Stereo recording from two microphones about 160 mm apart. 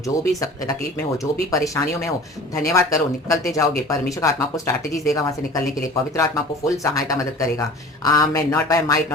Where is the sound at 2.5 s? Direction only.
20° left (ahead or behind).